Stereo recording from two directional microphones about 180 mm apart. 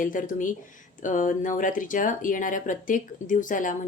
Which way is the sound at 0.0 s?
45° left (ahead or behind).